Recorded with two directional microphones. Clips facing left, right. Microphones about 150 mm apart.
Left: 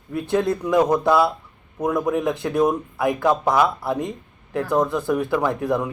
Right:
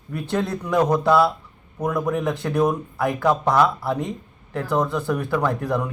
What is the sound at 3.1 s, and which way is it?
Speech, 20° left (ahead or behind).